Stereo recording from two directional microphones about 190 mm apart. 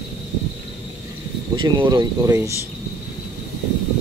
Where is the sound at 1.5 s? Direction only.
25° right (ahead or behind).